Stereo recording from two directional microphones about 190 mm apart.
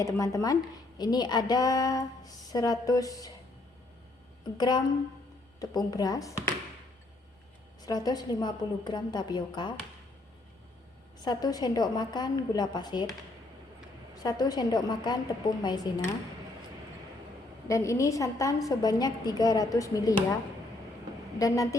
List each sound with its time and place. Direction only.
0.0 s a woman's voice: 15° left (ahead or behind)
4.5 s a woman's voice: 20° left (ahead or behind)
7.8 s a woman's voice: 20° left (ahead or behind)
11.2 s a woman's voice: 20° left (ahead or behind)
14.2 s a woman's voice: 20° left (ahead or behind)
17.7 s a woman's voice: 15° left (ahead or behind)
21.3 s a woman's voice: 15° left (ahead or behind)